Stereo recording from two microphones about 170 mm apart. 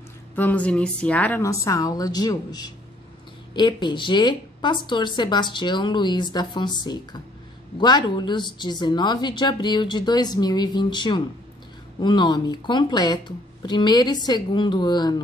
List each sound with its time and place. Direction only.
0.4 s a woman's voice: 10° left (ahead or behind); by 15.1 s 25° left (ahead or behind)